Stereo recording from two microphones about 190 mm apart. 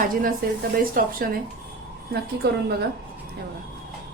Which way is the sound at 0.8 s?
50° right (ahead or behind).